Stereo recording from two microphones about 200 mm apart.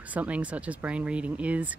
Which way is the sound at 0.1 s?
5° right (ahead or behind).